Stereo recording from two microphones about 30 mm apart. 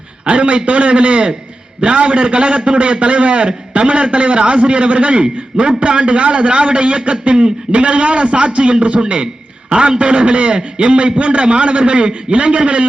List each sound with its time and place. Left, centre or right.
0.3 s a man's voice: right
9.2 s a sound: right
10.0 s a man's voice: right